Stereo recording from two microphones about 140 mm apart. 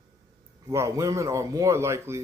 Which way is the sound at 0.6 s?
25° right (ahead or behind).